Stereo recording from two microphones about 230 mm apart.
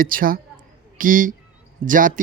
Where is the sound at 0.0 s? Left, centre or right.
Right.